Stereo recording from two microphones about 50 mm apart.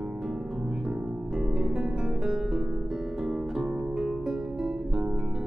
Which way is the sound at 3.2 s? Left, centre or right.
Centre.